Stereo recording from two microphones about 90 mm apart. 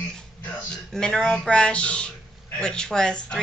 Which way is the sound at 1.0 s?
10° left (ahead or behind).